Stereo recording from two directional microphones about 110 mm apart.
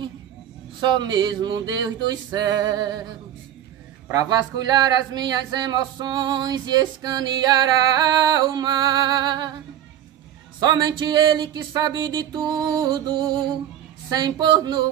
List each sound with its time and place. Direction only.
0.7 s speech: 45° right (ahead or behind)
4.1 s speech: 35° right (ahead or behind)
10.6 s speech: 40° right (ahead or behind)